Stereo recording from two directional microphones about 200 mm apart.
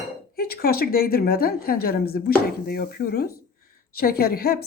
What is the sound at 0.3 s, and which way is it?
A woman's voice, 50° left (ahead or behind).